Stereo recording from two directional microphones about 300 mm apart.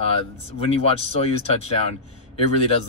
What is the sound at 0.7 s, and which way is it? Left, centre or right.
Speech, centre.